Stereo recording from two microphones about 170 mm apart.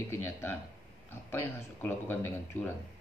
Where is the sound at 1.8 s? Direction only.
15° left (ahead or behind).